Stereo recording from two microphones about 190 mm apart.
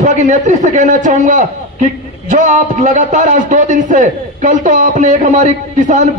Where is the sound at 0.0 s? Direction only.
40° right (ahead or behind).